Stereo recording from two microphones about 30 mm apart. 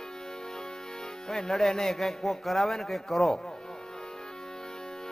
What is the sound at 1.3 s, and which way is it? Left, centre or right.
A man's voice, centre.